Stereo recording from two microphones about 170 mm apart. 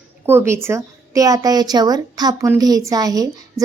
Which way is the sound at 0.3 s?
15° right (ahead or behind).